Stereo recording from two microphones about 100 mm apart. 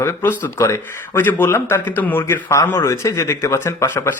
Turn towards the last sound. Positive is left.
turn(degrees=20)  # may be behind; listen again after turning